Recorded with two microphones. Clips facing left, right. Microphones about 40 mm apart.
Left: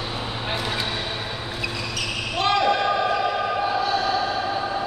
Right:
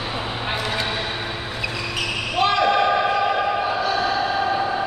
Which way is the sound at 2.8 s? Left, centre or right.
Right.